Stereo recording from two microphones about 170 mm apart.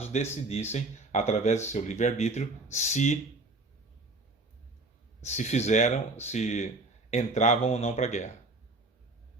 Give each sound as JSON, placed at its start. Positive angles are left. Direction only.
{"t": 0.0, "sound": "speech", "side_deg": 40}
{"t": 5.2, "sound": "speech", "side_deg": 40}